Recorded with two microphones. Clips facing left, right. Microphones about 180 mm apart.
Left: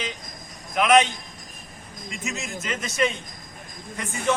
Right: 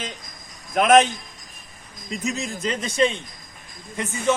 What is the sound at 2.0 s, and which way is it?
A man's voice, 35° right (ahead or behind).